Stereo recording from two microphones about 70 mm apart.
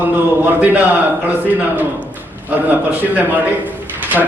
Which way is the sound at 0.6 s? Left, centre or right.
Right.